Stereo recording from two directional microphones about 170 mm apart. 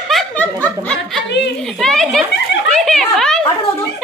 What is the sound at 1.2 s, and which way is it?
Speech, 90° left.